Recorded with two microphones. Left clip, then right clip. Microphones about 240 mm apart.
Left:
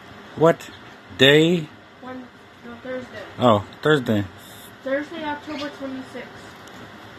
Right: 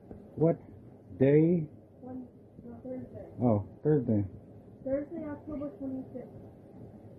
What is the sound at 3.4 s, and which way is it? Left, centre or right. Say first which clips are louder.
Speech: left 13 dB; left.